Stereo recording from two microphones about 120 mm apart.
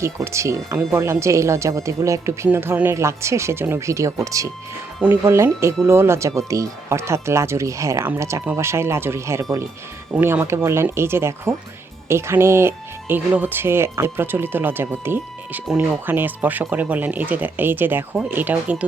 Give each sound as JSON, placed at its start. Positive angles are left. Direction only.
{"t": 0.3, "sound": "speech", "side_deg": -25}